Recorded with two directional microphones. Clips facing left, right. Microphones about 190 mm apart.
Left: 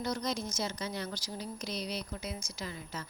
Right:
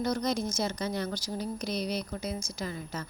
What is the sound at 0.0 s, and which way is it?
A woman's voice, 50° right (ahead or behind).